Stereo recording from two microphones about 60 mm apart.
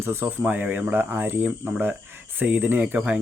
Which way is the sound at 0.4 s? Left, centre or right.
Right.